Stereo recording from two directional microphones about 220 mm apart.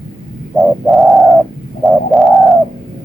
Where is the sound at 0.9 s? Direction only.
Centre (ahead or behind).